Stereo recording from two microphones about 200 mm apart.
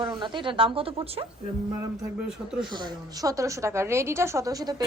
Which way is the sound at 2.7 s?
20° right (ahead or behind).